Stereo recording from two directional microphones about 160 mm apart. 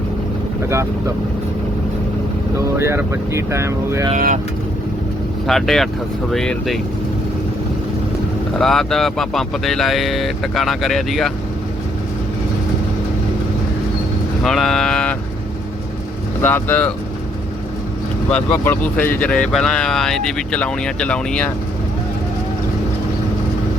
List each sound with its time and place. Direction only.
0.7 s speech: 20° right (ahead or behind)
2.6 s speech: 15° right (ahead or behind)
4.1 s speech: 55° right (ahead or behind)
5.5 s speech: centre (ahead or behind)
8.5 s speech: centre (ahead or behind)
14.4 s speech: 5° left (ahead or behind)
16.4 s speech: 15° left (ahead or behind)
18.3 s speech: 10° left (ahead or behind)